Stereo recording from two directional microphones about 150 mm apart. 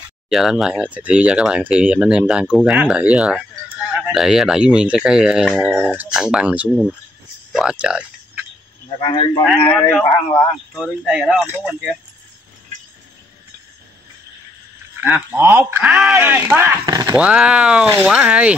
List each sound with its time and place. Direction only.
0.3 s speech: centre (ahead or behind)
7.5 s a sound: 5° right (ahead or behind)
9.0 s a man's voice: 30° left (ahead or behind)
9.7 s a man's voice: 15° left (ahead or behind)
10.7 s speech: 5° right (ahead or behind)
15.0 s speech: 15° right (ahead or behind)
16.8 s speech: 25° right (ahead or behind)
17.1 s speech: 10° right (ahead or behind)